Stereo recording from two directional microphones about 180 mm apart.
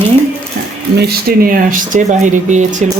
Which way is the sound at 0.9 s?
55° right (ahead or behind).